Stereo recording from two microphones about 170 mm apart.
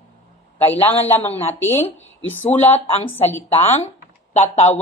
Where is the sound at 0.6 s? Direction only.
10° left (ahead or behind).